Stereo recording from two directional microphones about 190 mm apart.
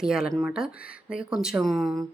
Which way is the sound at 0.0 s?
5° right (ahead or behind).